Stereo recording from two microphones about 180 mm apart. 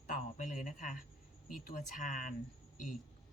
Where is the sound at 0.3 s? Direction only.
45° left (ahead or behind).